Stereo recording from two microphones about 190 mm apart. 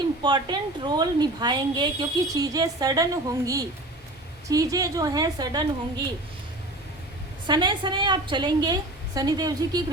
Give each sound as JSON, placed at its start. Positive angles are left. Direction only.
{"t": 0.2, "sound": "a woman's voice", "side_deg": -25}
{"t": 7.4, "sound": "a woman's voice", "side_deg": -25}